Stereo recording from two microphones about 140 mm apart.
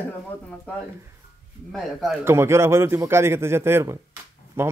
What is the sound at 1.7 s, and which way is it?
Speech, centre (ahead or behind).